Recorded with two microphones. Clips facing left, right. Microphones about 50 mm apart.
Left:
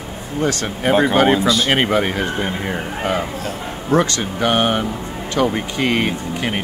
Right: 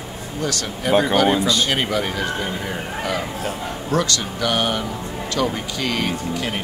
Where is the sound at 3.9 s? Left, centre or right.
Left.